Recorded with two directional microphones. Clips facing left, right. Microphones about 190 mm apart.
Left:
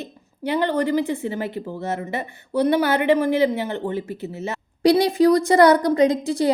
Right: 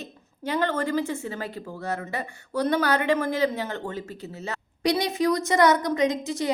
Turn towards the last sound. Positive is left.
turn(degrees=35)  # may be behind; listen again after turning